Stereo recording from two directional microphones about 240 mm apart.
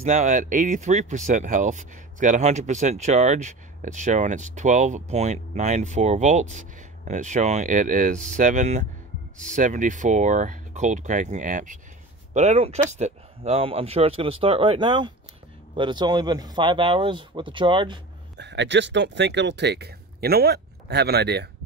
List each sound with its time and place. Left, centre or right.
0.0 s speech: right
18.4 s speech: right